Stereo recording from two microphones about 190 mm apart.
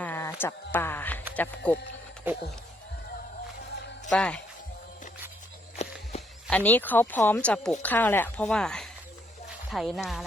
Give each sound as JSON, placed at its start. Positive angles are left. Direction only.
{"t": 0.0, "sound": "speech", "side_deg": 10}
{"t": 2.3, "sound": "speech", "side_deg": -10}
{"t": 4.1, "sound": "speech", "side_deg": 5}
{"t": 5.7, "sound": "walk", "side_deg": 35}
{"t": 6.5, "sound": "speech", "side_deg": 10}